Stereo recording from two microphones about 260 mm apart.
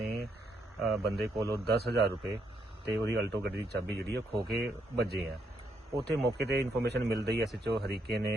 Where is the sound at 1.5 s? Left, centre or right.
Right.